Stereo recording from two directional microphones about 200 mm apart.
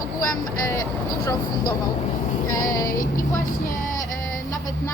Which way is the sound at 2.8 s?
45° left (ahead or behind).